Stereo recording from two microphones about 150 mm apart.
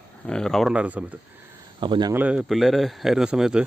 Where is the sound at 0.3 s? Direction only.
5° left (ahead or behind).